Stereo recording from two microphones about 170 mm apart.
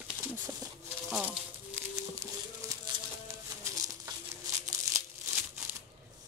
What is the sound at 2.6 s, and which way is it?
Music, 15° right (ahead or behind).